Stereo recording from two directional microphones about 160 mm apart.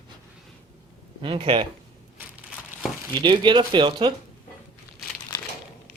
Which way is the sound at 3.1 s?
30° right (ahead or behind).